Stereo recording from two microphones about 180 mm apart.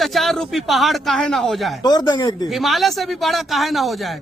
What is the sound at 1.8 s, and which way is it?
Speech, 20° left (ahead or behind).